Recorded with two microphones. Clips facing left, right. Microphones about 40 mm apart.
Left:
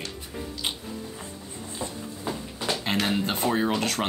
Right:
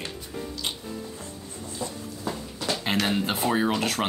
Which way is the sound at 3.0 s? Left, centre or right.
Centre.